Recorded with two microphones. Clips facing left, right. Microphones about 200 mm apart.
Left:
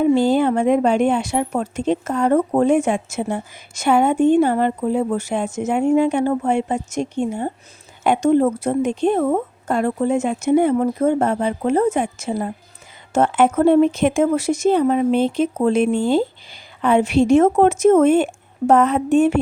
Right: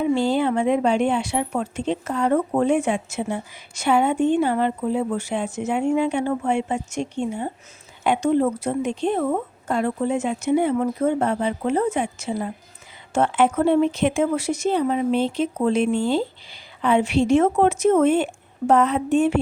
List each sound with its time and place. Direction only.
0.0 s a woman's voice: 45° left (ahead or behind)